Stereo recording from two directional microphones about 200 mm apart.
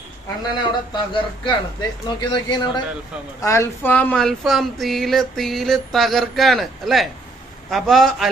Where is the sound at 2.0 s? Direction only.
20° left (ahead or behind).